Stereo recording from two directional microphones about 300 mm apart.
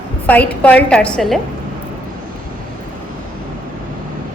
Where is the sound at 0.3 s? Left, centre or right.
Centre.